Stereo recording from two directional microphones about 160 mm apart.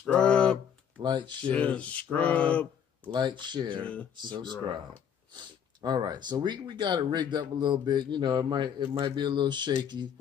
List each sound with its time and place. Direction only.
0.0 s speech: 5° left (ahead or behind)
1.0 s speech: 30° right (ahead or behind)
1.5 s speech: 10° left (ahead or behind)
3.1 s speech: 30° right (ahead or behind)